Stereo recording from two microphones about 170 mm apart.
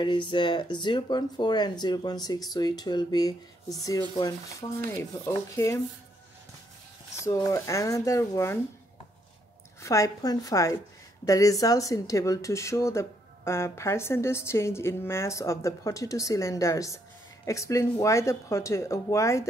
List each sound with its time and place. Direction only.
0.0 s speech: 30° left (ahead or behind)
7.2 s speech: 15° left (ahead or behind)
9.8 s speech: 20° left (ahead or behind)